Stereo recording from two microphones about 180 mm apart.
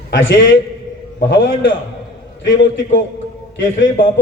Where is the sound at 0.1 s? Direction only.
90° left.